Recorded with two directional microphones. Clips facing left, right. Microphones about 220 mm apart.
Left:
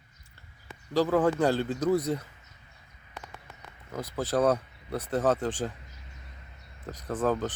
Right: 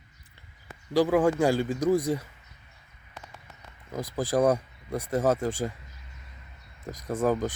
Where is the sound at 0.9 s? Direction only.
15° right (ahead or behind).